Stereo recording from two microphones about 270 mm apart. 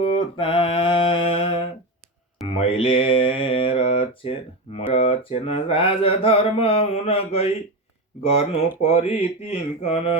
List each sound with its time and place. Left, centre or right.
0.0 s music: centre
2.5 s mantra: left